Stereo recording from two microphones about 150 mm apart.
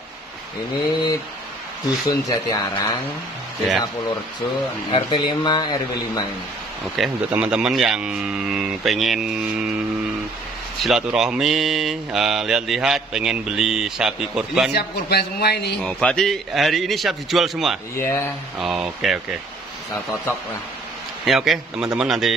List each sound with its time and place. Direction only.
2.0 s speech: 25° left (ahead or behind)
4.9 s speech: 30° left (ahead or behind)
7.0 s speech: 5° right (ahead or behind)
10.8 s speech: 5° right (ahead or behind)
14.7 s a man's voice: 90° left
15.8 s speech: 5° left (ahead or behind)
17.9 s speech: 15° left (ahead or behind)
18.6 s speech: 5° right (ahead or behind)
21.3 s speech: centre (ahead or behind)